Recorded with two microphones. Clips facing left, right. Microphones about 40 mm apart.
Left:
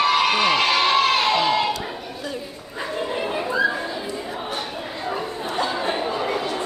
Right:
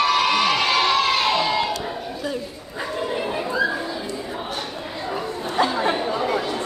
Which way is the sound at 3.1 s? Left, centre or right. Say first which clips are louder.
Left 1 dB; centre.